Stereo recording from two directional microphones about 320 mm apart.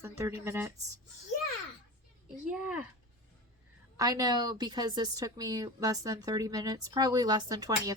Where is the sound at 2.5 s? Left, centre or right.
Centre.